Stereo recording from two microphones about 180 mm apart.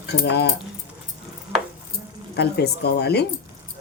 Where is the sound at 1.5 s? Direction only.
10° right (ahead or behind).